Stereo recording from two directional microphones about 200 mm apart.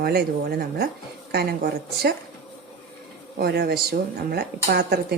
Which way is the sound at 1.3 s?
55° right (ahead or behind).